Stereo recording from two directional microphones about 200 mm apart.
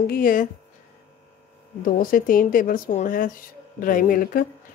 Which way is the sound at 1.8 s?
45° left (ahead or behind).